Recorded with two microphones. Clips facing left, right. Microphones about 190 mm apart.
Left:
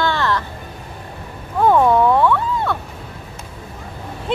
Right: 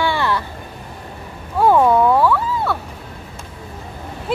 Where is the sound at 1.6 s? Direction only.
5° right (ahead or behind).